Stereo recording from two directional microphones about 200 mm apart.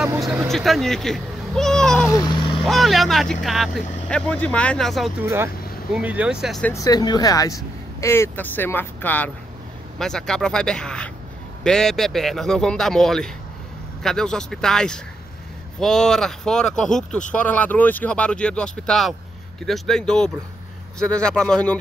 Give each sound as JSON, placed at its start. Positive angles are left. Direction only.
{"t": 0.5, "sound": "speech", "side_deg": 0}
{"t": 2.1, "sound": "vehicle", "side_deg": 20}
{"t": 2.6, "sound": "speech", "side_deg": 0}
{"t": 5.2, "sound": "speech", "side_deg": -10}
{"t": 6.7, "sound": "speech", "side_deg": 20}